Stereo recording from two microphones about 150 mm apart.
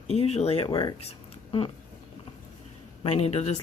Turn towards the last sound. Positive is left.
turn(degrees=45)  # may be behind; listen again after turning